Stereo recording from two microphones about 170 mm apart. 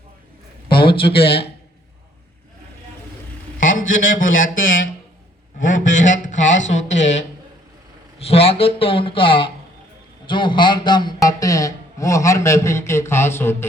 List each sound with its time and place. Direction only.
1.0 s speech: 30° left (ahead or behind)
3.6 s a man's voice: 50° left (ahead or behind); by 13.7 s 15° left (ahead or behind)